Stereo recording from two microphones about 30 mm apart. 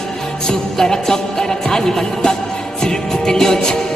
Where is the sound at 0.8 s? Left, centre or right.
Centre.